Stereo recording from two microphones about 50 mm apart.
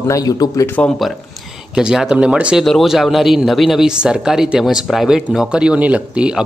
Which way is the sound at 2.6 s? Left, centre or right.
Centre.